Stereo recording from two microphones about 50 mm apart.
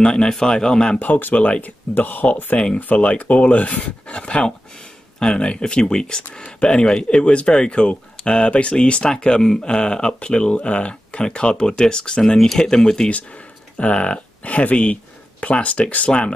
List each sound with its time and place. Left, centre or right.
0.0 s speech: centre
0.9 s speech: left
2.5 s speech: left
12.2 s speech: centre